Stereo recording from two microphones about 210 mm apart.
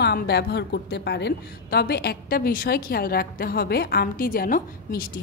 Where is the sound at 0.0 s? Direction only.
50° left (ahead or behind).